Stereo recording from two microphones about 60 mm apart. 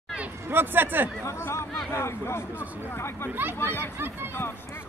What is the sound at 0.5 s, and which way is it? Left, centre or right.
Speech, right.